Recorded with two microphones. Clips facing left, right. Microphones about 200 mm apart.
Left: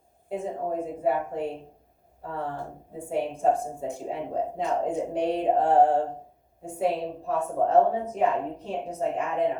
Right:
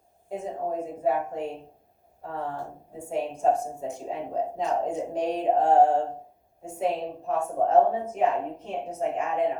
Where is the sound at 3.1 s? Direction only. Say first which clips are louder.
Even; 30° left (ahead or behind).